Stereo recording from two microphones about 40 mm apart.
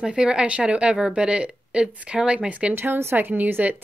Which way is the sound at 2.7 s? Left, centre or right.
Right.